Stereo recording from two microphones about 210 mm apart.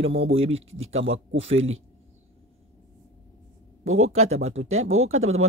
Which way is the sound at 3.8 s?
75° right (ahead or behind).